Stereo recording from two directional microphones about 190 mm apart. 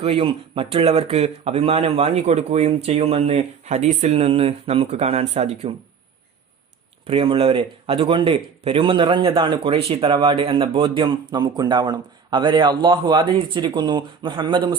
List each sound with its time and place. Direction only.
0.0 s a man's voice: 30° right (ahead or behind)
7.1 s speech: 30° right (ahead or behind)